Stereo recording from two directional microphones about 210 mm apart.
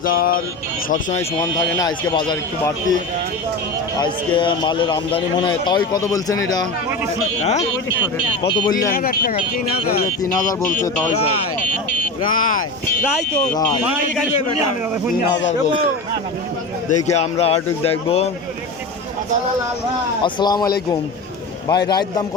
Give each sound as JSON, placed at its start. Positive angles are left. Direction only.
{"t": 0.0, "sound": "speech", "side_deg": 40}
{"t": 1.4, "sound": "speech", "side_deg": 20}
{"t": 4.0, "sound": "speech", "side_deg": 20}
{"t": 8.9, "sound": "speech", "side_deg": 40}
{"t": 10.4, "sound": "speech", "side_deg": 40}
{"t": 12.3, "sound": "speech", "side_deg": 40}
{"t": 16.9, "sound": "speech", "side_deg": 30}
{"t": 20.2, "sound": "speech", "side_deg": 20}